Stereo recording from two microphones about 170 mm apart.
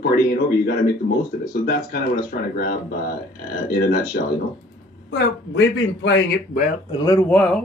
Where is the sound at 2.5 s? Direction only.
65° left (ahead or behind).